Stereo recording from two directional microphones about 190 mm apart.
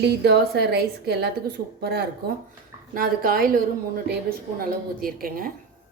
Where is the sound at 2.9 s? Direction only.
50° right (ahead or behind).